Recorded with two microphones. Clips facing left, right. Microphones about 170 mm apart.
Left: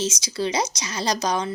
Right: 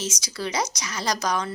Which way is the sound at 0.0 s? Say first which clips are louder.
Left 5 dB; 25° left (ahead or behind).